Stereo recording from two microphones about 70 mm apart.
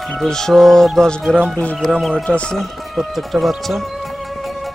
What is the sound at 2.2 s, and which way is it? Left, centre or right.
Speech, centre.